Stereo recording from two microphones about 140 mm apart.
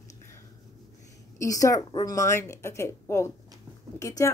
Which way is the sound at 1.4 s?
25° left (ahead or behind).